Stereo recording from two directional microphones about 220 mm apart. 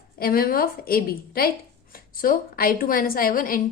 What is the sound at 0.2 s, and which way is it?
A woman's voice, 40° left (ahead or behind).